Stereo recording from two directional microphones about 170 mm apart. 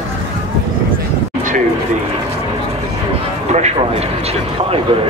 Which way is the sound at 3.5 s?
40° right (ahead or behind).